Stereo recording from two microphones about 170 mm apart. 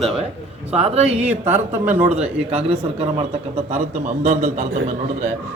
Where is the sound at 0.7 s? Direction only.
40° right (ahead or behind).